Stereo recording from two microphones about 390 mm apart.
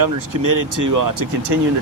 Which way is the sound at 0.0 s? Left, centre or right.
Right.